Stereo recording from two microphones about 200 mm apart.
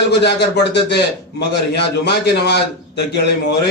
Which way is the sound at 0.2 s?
60° left (ahead or behind).